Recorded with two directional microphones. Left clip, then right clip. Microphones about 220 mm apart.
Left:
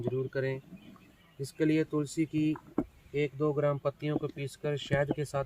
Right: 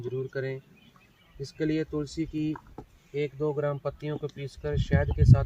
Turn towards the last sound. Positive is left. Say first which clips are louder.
# right 1 dB
turn(degrees=40)  # may be behind; listen again after turning